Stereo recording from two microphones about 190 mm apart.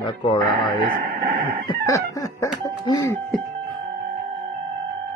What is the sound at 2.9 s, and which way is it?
Music, 15° left (ahead or behind).